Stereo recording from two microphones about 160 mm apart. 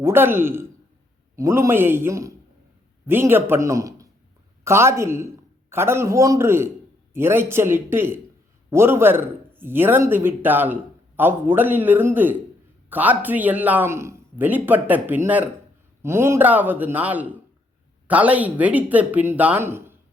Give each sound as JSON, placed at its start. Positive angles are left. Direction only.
{"t": 0.0, "sound": "speech", "side_deg": -15}